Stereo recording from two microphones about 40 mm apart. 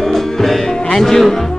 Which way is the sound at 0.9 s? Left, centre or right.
Centre.